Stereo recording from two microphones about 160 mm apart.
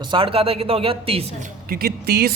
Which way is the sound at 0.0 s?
30° right (ahead or behind).